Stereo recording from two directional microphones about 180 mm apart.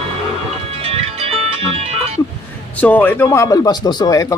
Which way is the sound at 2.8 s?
10° left (ahead or behind).